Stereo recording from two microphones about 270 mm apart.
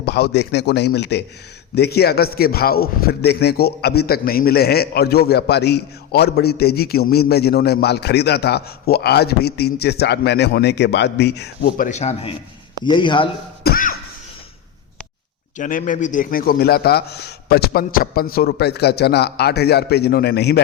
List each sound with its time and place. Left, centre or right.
0.0 s a man's voice: left; by 13.2 s centre
13.7 s a sound: left
15.5 s a man's voice: left